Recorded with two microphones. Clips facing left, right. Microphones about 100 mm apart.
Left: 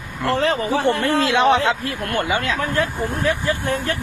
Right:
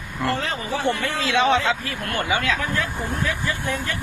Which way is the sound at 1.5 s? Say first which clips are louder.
Left 3 dB; 50° left (ahead or behind).